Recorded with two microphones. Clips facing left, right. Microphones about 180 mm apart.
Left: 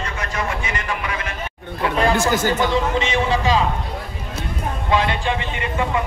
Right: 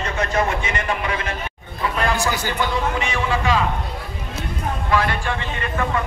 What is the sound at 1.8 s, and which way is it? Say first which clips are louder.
Speech: left 3 dB; 50° left (ahead or behind).